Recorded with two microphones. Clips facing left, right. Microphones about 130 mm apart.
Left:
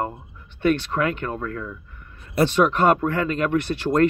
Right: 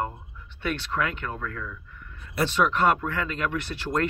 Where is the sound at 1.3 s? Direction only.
35° left (ahead or behind).